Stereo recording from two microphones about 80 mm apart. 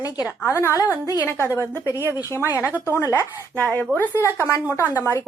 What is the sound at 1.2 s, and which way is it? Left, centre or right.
Speech, left.